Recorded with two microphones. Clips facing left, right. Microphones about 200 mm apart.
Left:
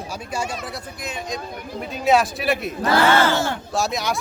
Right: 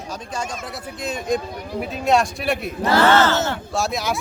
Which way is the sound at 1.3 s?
55° right (ahead or behind).